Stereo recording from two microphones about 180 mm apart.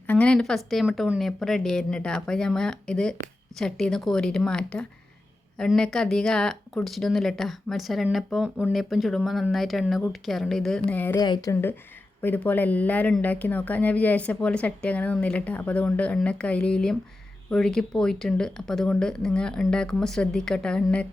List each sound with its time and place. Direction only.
0.1 s speech: 5° left (ahead or behind)
11.2 s speech: 20° left (ahead or behind)
12.2 s speech: 10° left (ahead or behind)